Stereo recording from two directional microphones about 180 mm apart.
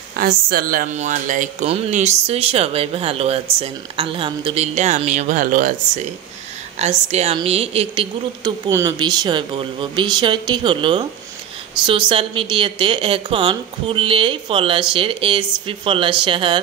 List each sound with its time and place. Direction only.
0.2 s speech: 55° right (ahead or behind)
6.8 s speech: 35° right (ahead or behind)
8.6 s speech: 20° right (ahead or behind)